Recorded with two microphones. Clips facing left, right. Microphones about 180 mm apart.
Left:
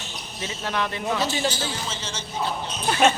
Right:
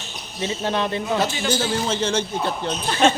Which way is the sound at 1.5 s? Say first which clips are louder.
Right 6 dB; 55° right (ahead or behind).